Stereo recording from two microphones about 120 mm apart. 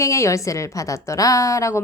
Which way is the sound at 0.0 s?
25° left (ahead or behind).